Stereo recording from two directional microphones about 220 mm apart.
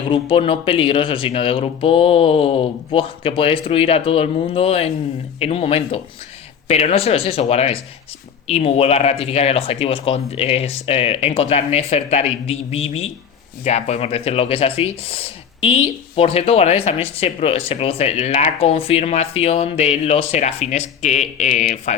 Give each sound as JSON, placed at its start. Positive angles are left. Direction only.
{"t": 0.1, "sound": "speech", "side_deg": 25}